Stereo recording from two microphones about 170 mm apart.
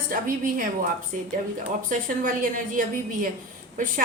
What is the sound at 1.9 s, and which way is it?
A woman's voice, 50° right (ahead or behind).